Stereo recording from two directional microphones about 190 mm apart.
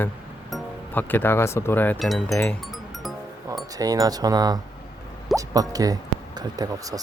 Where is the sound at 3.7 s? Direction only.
20° right (ahead or behind).